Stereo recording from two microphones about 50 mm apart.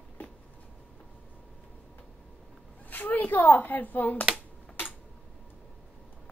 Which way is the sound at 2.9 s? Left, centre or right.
Left.